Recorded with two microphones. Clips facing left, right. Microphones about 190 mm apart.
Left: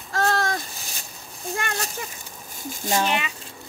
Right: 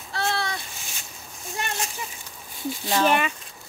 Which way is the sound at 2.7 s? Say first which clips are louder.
Left 1 dB; 45° left (ahead or behind).